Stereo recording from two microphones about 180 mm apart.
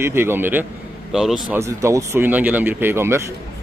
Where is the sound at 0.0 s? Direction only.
15° right (ahead or behind).